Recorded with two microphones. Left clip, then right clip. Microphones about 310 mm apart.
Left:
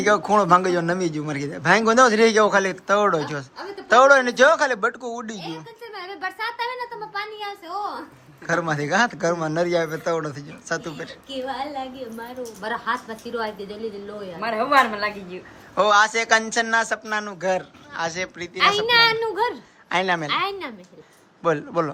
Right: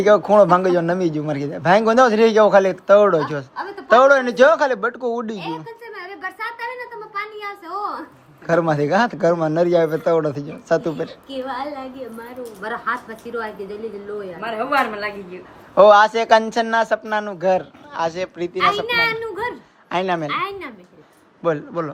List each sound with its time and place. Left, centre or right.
0.0 s a man's voice: centre
5.5 s a sound: centre
8.4 s a man's voice: centre
12.4 s a woman's voice: centre
14.4 s a child's voice: left
15.7 s a man's voice: centre
18.5 s a child's voice: left
19.9 s a man's voice: centre
20.2 s a child's voice: centre
21.4 s a man's voice: centre